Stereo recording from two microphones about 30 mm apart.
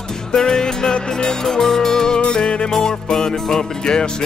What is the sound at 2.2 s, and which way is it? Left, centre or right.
Music, left.